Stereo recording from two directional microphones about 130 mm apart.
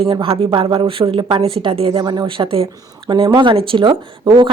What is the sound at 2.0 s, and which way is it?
Speech, 35° right (ahead or behind).